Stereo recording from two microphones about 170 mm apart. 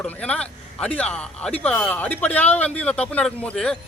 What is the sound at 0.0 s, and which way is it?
Speech, 5° left (ahead or behind).